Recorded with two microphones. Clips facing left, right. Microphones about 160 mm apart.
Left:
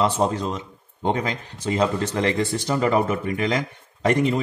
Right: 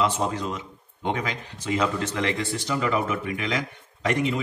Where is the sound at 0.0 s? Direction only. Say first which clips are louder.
Left 4 dB; 35° left (ahead or behind).